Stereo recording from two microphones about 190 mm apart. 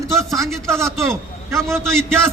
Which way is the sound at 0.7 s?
15° right (ahead or behind).